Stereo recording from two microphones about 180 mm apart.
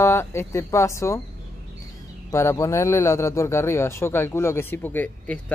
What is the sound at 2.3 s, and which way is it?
Speech, 15° left (ahead or behind).